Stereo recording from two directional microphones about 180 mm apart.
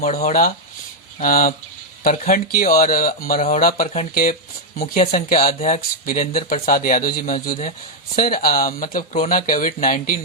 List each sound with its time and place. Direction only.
0.0 s speech: 45° left (ahead or behind)